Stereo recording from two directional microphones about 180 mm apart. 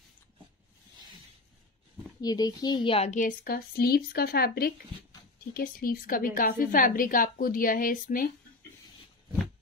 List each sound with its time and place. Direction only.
2.2 s a woman's voice: 20° left (ahead or behind); by 8.3 s 50° left (ahead or behind)